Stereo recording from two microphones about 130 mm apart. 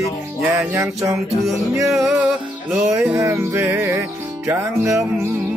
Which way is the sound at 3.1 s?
20° right (ahead or behind).